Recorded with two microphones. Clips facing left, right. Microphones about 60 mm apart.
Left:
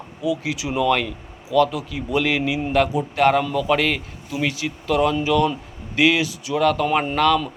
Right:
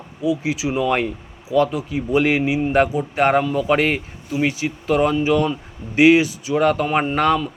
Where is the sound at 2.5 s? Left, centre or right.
Centre.